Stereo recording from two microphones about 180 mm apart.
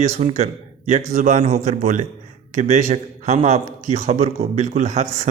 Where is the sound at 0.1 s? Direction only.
40° right (ahead or behind).